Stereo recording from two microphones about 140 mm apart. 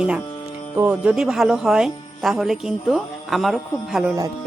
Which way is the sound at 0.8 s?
10° right (ahead or behind).